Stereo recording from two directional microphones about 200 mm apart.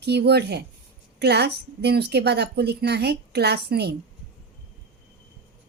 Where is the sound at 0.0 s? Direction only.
55° right (ahead or behind).